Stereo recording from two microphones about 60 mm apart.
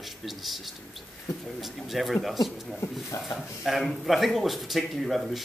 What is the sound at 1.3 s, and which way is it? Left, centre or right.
Speech, left.